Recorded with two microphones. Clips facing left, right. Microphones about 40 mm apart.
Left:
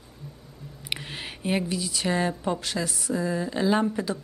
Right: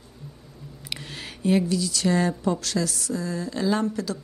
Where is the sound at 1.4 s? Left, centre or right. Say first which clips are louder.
Right 5 dB; left.